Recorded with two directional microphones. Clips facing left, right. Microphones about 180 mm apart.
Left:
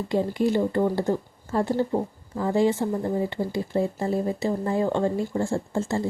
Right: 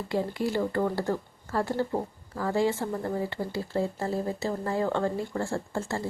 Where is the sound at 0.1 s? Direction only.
20° left (ahead or behind).